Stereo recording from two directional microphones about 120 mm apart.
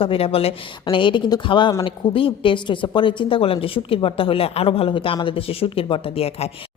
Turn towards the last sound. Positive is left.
turn(degrees=55)  # may be behind; listen again after turning